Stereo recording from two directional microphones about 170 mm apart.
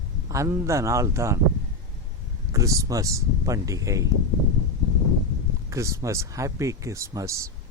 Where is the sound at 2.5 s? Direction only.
20° right (ahead or behind).